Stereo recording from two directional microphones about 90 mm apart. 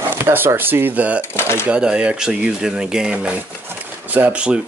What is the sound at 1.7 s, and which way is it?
Speech, 10° right (ahead or behind).